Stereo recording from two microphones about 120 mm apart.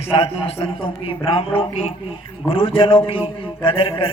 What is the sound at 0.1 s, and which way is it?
A man's voice, 50° left (ahead or behind).